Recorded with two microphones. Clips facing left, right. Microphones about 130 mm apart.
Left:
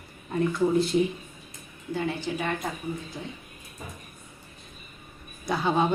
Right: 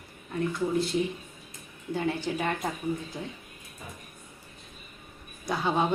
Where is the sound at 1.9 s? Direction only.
40° right (ahead or behind).